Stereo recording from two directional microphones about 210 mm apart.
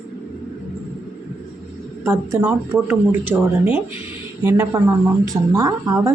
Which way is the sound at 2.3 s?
10° right (ahead or behind).